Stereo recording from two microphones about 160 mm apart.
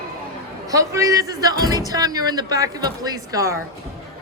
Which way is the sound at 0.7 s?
20° right (ahead or behind).